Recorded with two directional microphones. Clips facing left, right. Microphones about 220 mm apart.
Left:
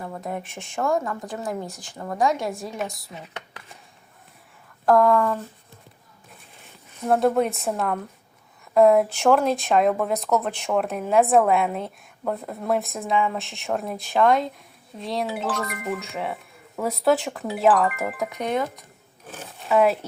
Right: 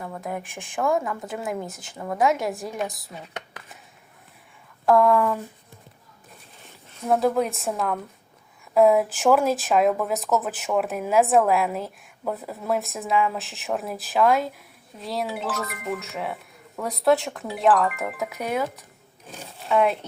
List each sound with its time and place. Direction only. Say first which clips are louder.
0.0 s a woman's voice: left 1 dB; centre (ahead or behind)
1.6 s speech: even; 20° right (ahead or behind)
1.9 s a woman's voice: right 1 dB; 5° right (ahead or behind)
4.9 s a woman's voice: even; centre (ahead or behind)
7.1 s a woman's voice: left 1 dB; centre (ahead or behind)